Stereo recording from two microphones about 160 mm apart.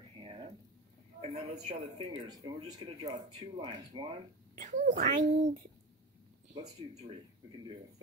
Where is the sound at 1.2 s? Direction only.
40° right (ahead or behind).